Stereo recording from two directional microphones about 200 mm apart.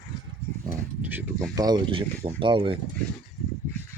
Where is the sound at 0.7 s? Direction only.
10° right (ahead or behind).